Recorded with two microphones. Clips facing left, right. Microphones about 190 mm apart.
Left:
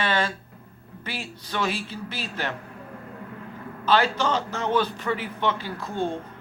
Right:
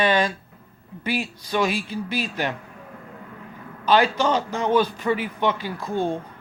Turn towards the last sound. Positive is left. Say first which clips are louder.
# right 3 dB
turn(degrees=-10)  # may be behind; listen again after turning